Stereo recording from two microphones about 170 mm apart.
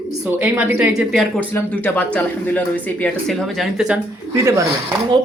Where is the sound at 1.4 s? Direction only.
10° left (ahead or behind).